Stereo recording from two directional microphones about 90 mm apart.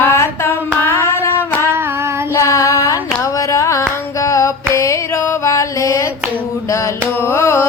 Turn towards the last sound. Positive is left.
turn(degrees=30)  # may be behind; listen again after turning